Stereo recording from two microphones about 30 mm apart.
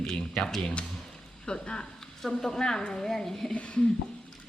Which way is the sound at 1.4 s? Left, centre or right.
Left.